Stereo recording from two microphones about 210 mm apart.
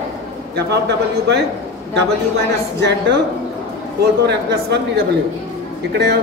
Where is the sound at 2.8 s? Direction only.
55° right (ahead or behind).